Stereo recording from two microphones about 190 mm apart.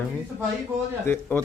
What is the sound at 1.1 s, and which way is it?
Speech, 10° left (ahead or behind).